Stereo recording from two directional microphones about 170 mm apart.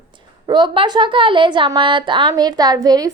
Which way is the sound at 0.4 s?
25° right (ahead or behind).